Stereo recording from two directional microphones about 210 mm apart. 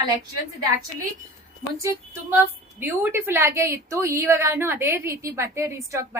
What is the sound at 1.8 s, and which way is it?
A woman's voice, 15° right (ahead or behind).